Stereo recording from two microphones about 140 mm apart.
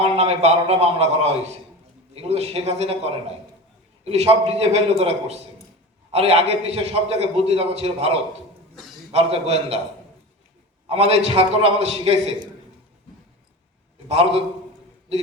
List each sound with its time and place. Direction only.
0.0 s a man's voice: 50° right (ahead or behind)
10.8 s a man's voice: 45° right (ahead or behind)